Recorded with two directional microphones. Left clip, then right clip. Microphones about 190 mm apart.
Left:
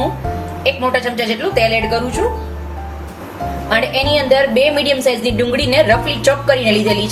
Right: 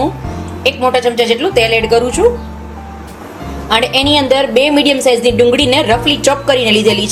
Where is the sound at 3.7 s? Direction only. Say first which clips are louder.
Right 4 dB; 40° right (ahead or behind).